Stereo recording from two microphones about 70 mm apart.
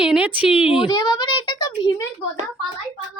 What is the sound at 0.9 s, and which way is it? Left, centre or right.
Speech, left.